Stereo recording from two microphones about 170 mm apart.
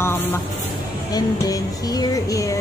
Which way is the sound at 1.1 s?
20° left (ahead or behind).